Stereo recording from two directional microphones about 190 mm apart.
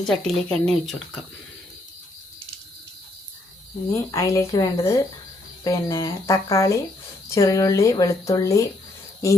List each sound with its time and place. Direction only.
0.0 s speech: centre (ahead or behind)
4.1 s speech: 15° left (ahead or behind)